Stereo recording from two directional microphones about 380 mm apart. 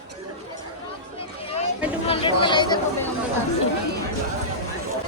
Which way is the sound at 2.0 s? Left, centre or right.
Centre.